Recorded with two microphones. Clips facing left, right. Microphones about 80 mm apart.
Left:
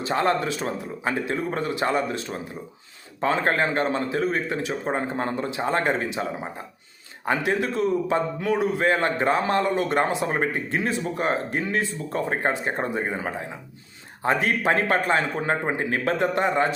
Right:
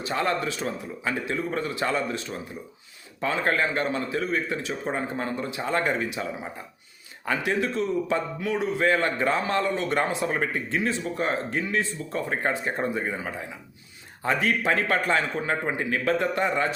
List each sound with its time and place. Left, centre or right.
0.1 s a man's voice: left
3.2 s a man's voice: left
4.7 s a man's voice: left